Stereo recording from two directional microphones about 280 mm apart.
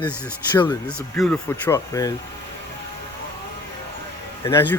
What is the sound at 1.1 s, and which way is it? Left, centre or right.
Speech, centre.